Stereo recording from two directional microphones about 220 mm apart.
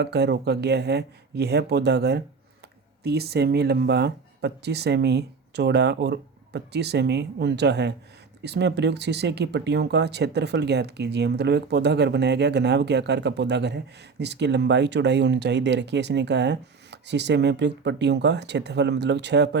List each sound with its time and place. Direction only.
0.0 s speech: 50° right (ahead or behind)